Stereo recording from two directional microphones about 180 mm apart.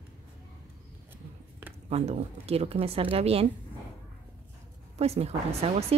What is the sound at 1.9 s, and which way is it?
Speech, 35° right (ahead or behind).